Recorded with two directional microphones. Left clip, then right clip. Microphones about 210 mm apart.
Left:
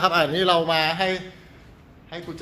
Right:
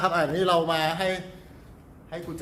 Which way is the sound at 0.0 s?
25° left (ahead or behind).